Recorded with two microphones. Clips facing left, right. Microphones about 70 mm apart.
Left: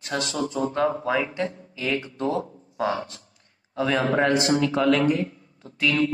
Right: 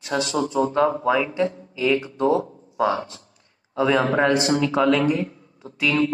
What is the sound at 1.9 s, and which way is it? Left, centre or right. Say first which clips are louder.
Speech: right 3 dB; right.